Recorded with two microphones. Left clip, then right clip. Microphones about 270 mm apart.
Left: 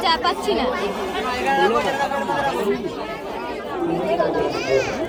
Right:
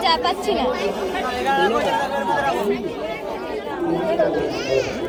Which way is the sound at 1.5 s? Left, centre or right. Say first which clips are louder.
Even; left.